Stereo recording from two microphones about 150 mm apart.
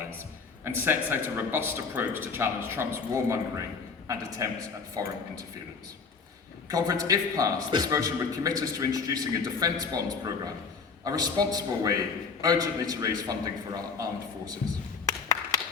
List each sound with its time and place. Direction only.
0.6 s a man's voice: 15° right (ahead or behind)
6.7 s a man's voice: 25° right (ahead or behind)